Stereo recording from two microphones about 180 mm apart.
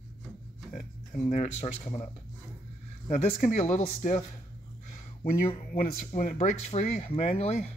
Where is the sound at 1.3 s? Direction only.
40° left (ahead or behind).